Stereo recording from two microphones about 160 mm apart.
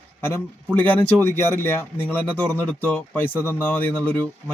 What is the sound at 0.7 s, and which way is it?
Speech, 10° left (ahead or behind).